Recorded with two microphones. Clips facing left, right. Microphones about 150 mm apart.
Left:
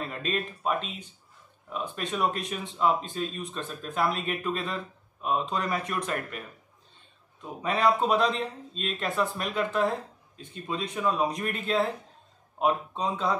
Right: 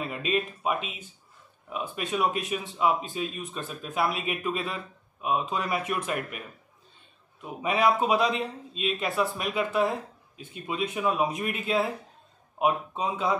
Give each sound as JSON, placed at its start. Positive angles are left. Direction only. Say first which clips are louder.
{"t": 0.0, "sound": "speech", "louder": "right 3 dB", "side_deg": -10}
{"t": 7.4, "sound": "speech", "louder": "right 1 dB", "side_deg": -10}